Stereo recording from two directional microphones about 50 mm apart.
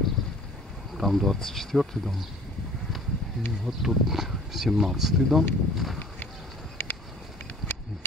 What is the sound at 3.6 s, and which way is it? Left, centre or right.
Speech, centre.